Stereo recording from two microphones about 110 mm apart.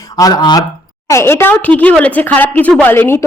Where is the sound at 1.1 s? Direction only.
25° left (ahead or behind).